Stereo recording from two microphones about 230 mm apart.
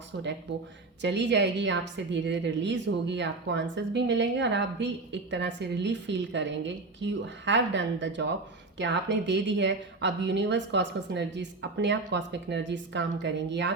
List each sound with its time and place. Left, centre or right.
1.0 s a woman's voice: right